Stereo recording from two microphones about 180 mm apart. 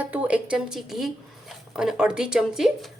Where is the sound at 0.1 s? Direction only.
5° right (ahead or behind).